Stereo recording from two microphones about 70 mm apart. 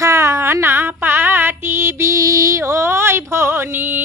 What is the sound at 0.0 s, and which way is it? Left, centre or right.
Female singing, right.